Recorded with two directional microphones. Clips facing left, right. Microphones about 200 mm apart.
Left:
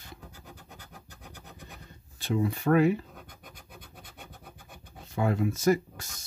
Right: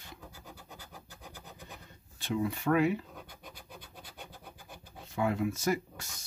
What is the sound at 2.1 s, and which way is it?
Speech, 40° left (ahead or behind).